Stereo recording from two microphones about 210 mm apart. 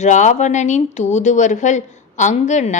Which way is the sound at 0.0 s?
35° left (ahead or behind).